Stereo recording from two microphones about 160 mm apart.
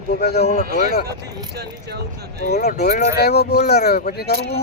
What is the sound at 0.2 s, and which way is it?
Speech, 80° left.